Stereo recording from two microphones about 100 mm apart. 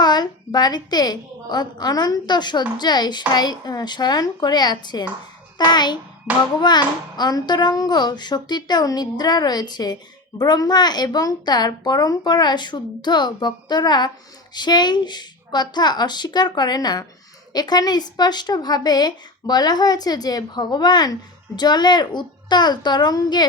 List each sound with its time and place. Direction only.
0.0 s a child's voice: 45° left (ahead or behind)
6.3 s music: 10° right (ahead or behind)
6.6 s a child's voice: 45° left (ahead or behind)